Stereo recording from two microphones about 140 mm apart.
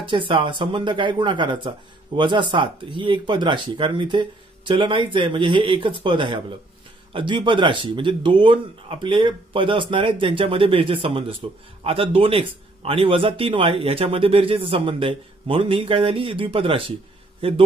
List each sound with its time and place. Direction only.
0.0 s a man's voice: 35° right (ahead or behind)